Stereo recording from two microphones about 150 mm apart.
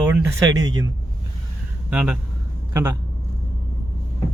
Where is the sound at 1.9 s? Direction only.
5° right (ahead or behind).